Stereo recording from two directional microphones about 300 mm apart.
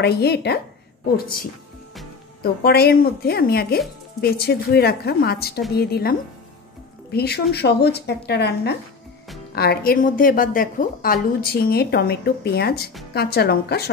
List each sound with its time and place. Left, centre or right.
0.0 s a woman's voice: left